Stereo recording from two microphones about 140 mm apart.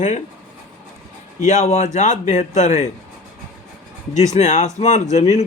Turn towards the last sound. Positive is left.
turn(degrees=55)  # may be behind; listen again after turning